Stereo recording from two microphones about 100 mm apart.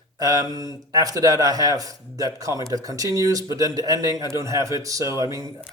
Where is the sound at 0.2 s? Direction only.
40° right (ahead or behind).